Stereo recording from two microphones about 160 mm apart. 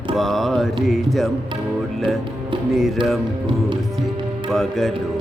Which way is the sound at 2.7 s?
Centre (ahead or behind).